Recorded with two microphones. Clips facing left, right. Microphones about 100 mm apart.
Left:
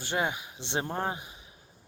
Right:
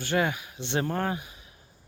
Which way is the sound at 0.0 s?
20° left (ahead or behind).